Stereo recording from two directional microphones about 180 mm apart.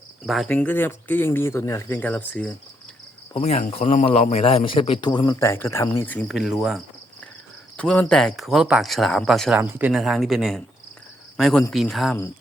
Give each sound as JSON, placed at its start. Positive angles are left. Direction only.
{"t": 0.3, "sound": "speech", "side_deg": 5}
{"t": 3.3, "sound": "a man's voice", "side_deg": 35}
{"t": 6.3, "sound": "speech", "side_deg": 0}
{"t": 9.6, "sound": "speech", "side_deg": -10}